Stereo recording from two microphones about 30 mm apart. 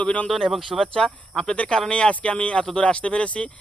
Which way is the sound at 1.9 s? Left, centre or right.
Left.